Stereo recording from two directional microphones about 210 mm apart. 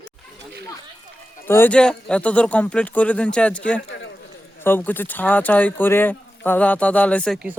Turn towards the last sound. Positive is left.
turn(degrees=5)  # may be behind; listen again after turning